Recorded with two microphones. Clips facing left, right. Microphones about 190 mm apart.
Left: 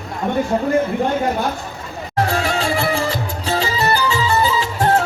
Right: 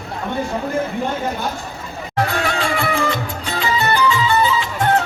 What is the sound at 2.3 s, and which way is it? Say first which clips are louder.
Music: left 1 dB; 30° left (ahead or behind).